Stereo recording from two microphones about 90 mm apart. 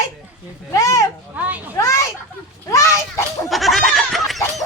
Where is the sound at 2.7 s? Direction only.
35° left (ahead or behind).